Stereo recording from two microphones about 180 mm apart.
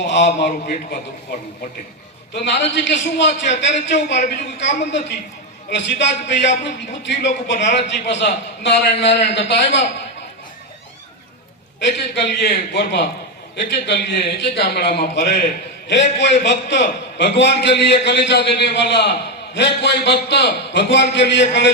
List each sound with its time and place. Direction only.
0.0 s a man's voice: 75° left (ahead or behind)
2.3 s a man's voice: 75° left (ahead or behind)
11.8 s a man's voice: 75° left (ahead or behind)